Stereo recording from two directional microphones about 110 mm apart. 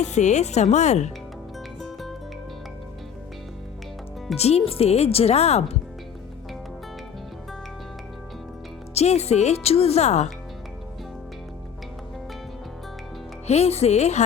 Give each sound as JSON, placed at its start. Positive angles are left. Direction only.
{"t": 0.0, "sound": "speech", "side_deg": 90}
{"t": 1.8, "sound": "music", "side_deg": 0}
{"t": 4.4, "sound": "speech", "side_deg": 70}
{"t": 9.0, "sound": "speech", "side_deg": 75}
{"t": 13.5, "sound": "speech", "side_deg": 70}